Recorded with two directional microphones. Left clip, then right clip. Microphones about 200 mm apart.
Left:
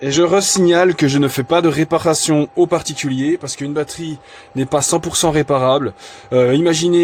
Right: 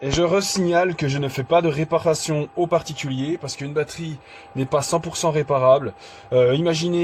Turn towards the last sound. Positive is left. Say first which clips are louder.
# left 8 dB
turn(degrees=50)  # may be behind; listen again after turning